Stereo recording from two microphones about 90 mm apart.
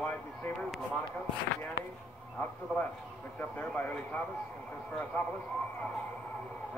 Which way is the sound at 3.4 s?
15° left (ahead or behind).